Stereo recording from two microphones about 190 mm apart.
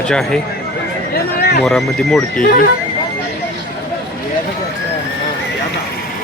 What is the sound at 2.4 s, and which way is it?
Speech, 50° left (ahead or behind).